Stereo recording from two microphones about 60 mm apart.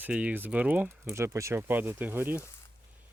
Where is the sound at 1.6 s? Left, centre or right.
Right.